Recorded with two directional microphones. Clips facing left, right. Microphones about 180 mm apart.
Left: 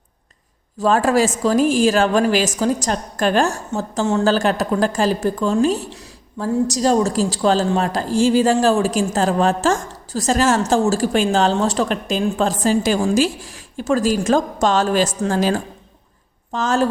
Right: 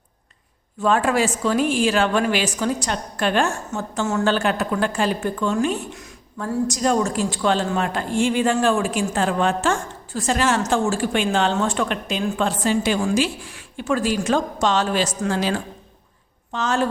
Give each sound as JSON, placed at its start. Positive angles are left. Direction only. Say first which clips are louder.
{"t": 0.8, "sound": "a woman's voice", "louder": "left 3 dB", "side_deg": 40}